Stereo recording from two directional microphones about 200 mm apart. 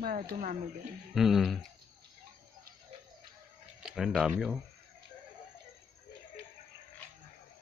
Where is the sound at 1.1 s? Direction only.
Centre (ahead or behind).